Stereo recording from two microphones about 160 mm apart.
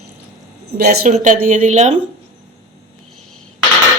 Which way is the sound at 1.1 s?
55° right (ahead or behind).